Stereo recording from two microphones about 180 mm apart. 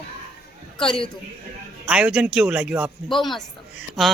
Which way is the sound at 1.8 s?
5° right (ahead or behind).